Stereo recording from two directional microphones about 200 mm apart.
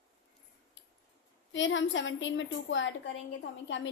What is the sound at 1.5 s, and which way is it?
A woman's voice, 70° left (ahead or behind).